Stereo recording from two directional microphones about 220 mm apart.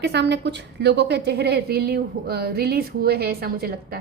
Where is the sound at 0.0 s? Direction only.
50° right (ahead or behind).